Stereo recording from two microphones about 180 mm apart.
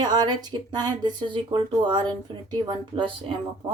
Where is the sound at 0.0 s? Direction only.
25° right (ahead or behind).